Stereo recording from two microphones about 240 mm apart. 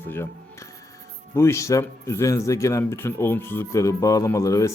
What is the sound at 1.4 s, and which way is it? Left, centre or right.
Speech, centre.